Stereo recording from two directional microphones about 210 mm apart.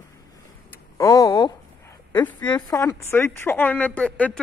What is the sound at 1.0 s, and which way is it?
A woman's voice, 15° left (ahead or behind).